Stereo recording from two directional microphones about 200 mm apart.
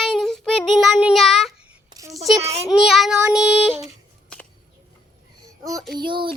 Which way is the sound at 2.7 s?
Centre (ahead or behind).